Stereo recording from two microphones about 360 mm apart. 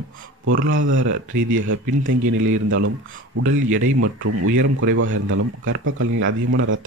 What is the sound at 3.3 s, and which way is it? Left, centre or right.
Speech, right.